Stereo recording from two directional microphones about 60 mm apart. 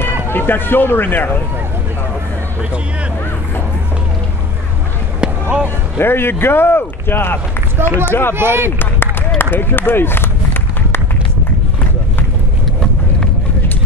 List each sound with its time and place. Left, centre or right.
0.0 s speech: left
5.2 s basketball bounce: right
5.9 s speech: left
8.4 s speech: right
9.4 s run: left